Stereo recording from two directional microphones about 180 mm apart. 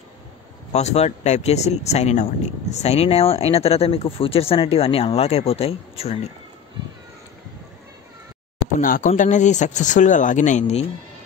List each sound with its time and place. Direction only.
0.7 s speech: 35° left (ahead or behind)
8.7 s speech: 45° left (ahead or behind)